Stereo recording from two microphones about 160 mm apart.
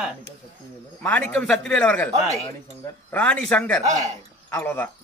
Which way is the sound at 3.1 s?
10° left (ahead or behind).